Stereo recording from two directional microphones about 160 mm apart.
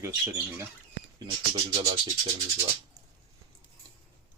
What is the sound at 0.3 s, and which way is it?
Speech, 15° right (ahead or behind).